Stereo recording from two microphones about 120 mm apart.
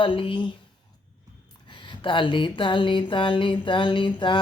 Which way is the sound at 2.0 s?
45° left (ahead or behind).